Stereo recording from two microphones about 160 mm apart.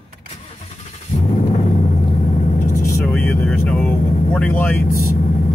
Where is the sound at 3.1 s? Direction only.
5° left (ahead or behind).